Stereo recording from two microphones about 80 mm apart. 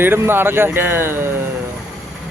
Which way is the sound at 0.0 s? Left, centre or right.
Right.